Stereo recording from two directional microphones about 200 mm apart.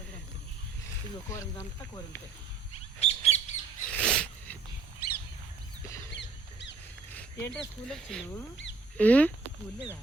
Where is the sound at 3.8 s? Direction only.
5° left (ahead or behind).